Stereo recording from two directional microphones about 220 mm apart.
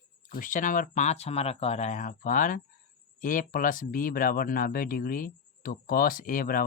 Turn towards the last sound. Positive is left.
turn(degrees=40)  # may be behind; listen again after turning